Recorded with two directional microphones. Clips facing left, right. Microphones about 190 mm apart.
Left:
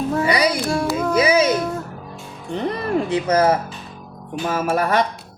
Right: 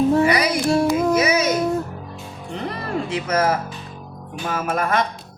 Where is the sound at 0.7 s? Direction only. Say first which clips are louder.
Right 3 dB; 25° right (ahead or behind).